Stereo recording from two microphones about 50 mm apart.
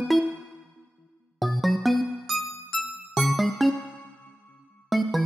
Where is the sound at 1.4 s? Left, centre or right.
Centre.